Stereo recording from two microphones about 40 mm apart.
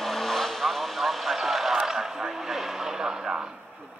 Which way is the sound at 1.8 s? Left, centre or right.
Centre.